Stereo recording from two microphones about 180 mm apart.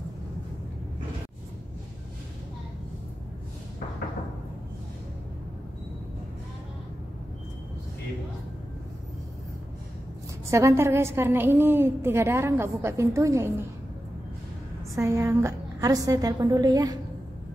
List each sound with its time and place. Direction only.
10.5 s a woman's voice: 15° right (ahead or behind)
15.0 s a woman's voice: 15° right (ahead or behind)